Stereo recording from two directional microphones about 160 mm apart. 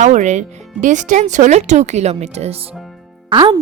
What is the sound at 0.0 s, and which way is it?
Speech, 50° right (ahead or behind).